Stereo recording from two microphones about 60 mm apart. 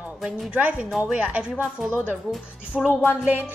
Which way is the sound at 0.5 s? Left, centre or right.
Right.